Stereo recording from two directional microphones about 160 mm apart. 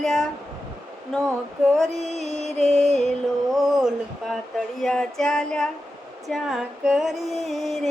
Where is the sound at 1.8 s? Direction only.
45° right (ahead or behind).